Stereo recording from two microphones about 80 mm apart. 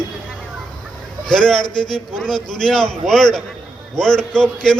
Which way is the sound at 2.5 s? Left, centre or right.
Centre.